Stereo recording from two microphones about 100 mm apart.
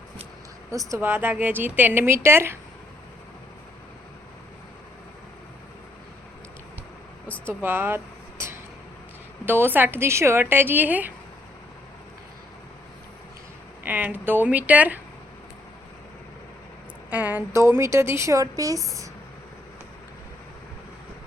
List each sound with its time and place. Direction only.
0.9 s a woman's voice: 20° right (ahead or behind)
7.3 s a sound: 15° left (ahead or behind)
7.6 s vehicle: 20° right (ahead or behind)
9.5 s a woman's voice: 20° right (ahead or behind)
13.8 s speech: 20° right (ahead or behind)
17.1 s speech: 15° right (ahead or behind)
17.5 s a woman's voice: 30° right (ahead or behind)